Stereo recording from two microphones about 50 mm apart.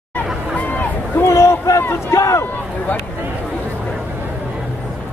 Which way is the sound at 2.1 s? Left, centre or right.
Left.